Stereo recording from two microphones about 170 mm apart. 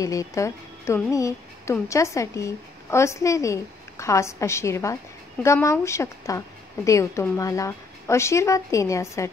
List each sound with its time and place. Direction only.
0.0 s speech: 20° left (ahead or behind)